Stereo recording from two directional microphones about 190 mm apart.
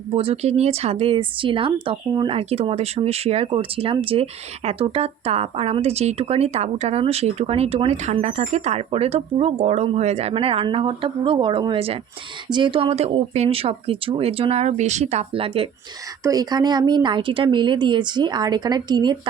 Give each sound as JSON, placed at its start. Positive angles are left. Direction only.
{"t": 0.2, "sound": "speech", "side_deg": -30}